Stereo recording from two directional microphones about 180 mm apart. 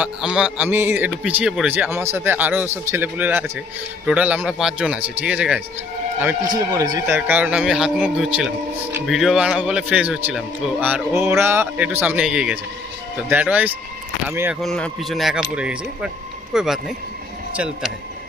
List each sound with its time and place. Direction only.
0.0 s a man's voice: 5° right (ahead or behind)
6.7 s speech: 20° right (ahead or behind)
7.2 s a man's voice: 10° right (ahead or behind)
14.6 s speech: centre (ahead or behind)